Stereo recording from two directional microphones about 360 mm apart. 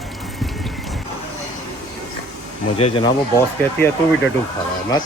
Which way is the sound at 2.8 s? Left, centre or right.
Centre.